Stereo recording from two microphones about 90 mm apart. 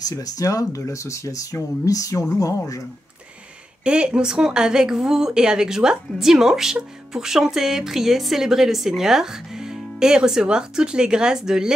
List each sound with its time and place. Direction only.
0.0 s speech: 40° left (ahead or behind)
3.8 s a woman's voice: 10° right (ahead or behind)